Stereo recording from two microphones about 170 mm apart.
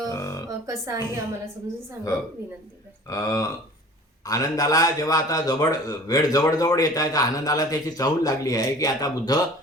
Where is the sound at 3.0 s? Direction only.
20° left (ahead or behind).